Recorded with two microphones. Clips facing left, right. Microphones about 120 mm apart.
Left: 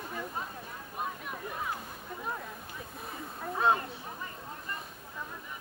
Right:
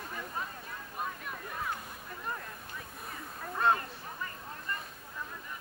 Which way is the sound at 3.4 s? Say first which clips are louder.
Left 1 dB; 5° left (ahead or behind).